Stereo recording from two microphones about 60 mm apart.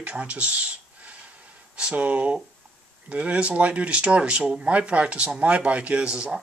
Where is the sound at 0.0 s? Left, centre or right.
Right.